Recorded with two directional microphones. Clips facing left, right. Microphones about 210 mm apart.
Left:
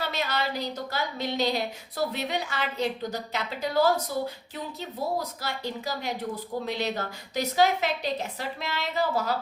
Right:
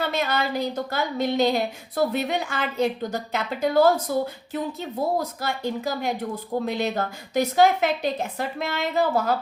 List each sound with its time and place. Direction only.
0.0 s a woman's voice: 50° right (ahead or behind)